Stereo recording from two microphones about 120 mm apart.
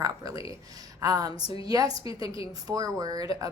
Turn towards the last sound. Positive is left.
turn(degrees=-30)  # may be behind; listen again after turning